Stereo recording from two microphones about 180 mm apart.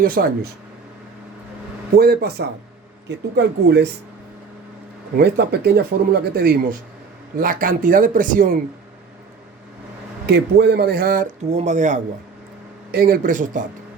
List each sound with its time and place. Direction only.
0.0 s speech: 55° right (ahead or behind)
2.0 s speech: 60° right (ahead or behind)
3.1 s speech: 70° right (ahead or behind)
5.1 s speech: 65° right (ahead or behind)
10.2 s speech: 65° right (ahead or behind); by 11.9 s 40° right (ahead or behind)
12.9 s speech: 55° right (ahead or behind)